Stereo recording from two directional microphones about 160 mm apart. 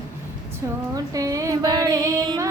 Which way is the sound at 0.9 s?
20° right (ahead or behind).